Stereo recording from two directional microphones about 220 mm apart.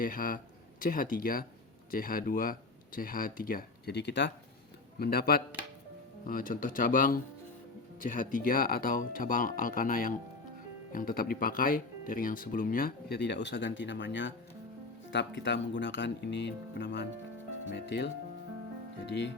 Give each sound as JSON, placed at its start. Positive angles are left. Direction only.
{"t": 0.0, "sound": "speech", "side_deg": 40}